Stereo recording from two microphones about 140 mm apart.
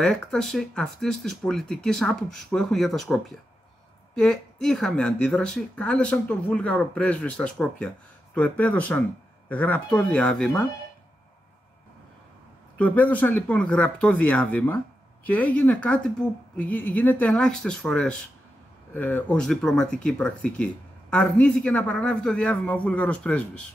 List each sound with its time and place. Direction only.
0.0 s speech: 5° left (ahead or behind)
12.7 s speech: 10° left (ahead or behind)